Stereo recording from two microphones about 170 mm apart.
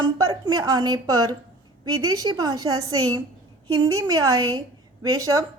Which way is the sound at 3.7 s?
20° right (ahead or behind).